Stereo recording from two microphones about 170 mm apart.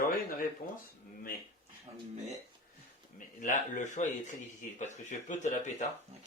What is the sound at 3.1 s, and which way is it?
Speech, 50° left (ahead or behind).